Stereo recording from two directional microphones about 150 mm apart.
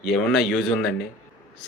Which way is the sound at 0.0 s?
Centre (ahead or behind).